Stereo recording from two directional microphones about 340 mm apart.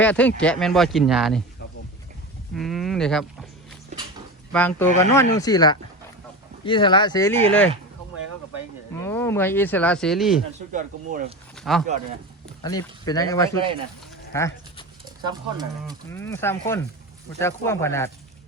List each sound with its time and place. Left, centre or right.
0.0 s speech: centre
2.6 s speech: centre
4.5 s speech: centre
9.0 s speech: centre
10.7 s speech: right
11.5 s speech: centre
14.3 s sheep: centre
15.3 s speech: centre
16.1 s speech: centre